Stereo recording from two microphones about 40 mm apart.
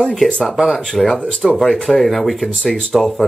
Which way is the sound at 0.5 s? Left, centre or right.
Centre.